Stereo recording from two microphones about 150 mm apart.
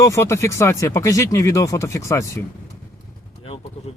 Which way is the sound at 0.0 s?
20° left (ahead or behind).